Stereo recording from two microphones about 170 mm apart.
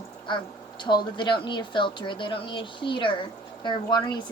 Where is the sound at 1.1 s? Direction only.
25° left (ahead or behind).